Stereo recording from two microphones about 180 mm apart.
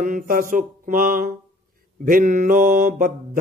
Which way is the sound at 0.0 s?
50° right (ahead or behind).